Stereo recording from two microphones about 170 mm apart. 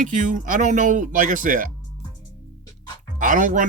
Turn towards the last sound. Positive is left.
turn(degrees=-50)  # may be behind; listen again after turning